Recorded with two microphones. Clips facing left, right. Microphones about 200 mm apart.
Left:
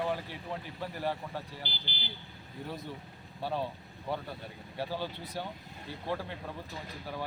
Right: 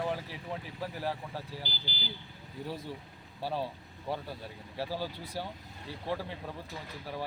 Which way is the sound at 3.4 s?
5° right (ahead or behind).